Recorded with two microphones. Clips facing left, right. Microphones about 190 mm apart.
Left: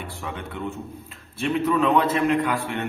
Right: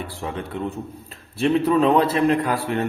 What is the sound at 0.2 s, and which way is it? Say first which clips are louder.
A man's voice: right 4 dB; 35° right (ahead or behind).